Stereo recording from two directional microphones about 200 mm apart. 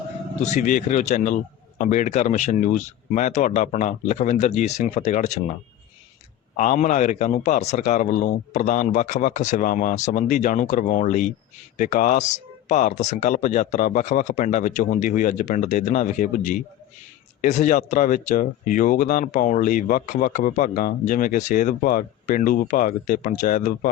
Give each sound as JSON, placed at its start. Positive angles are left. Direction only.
{"t": 0.4, "sound": "speech", "side_deg": 35}
{"t": 6.6, "sound": "speech", "side_deg": 40}